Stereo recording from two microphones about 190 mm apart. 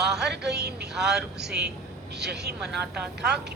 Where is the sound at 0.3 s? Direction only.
60° right (ahead or behind).